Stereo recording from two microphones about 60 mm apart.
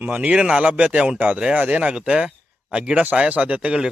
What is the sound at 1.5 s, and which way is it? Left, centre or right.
Speech, right.